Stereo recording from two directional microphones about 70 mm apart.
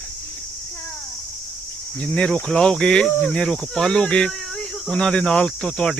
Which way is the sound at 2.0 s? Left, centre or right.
Centre.